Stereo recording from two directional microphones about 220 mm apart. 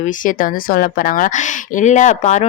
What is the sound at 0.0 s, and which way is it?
A woman's voice, 40° left (ahead or behind).